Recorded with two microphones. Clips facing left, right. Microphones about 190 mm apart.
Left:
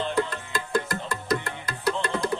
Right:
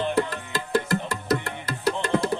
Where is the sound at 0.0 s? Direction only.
15° right (ahead or behind).